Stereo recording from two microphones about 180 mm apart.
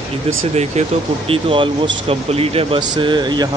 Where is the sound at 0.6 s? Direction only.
35° right (ahead or behind).